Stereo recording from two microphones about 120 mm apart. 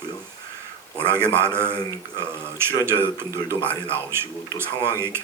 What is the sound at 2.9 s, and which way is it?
Speech, 20° right (ahead or behind).